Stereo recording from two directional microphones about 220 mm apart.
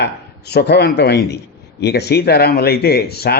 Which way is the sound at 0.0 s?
50° left (ahead or behind).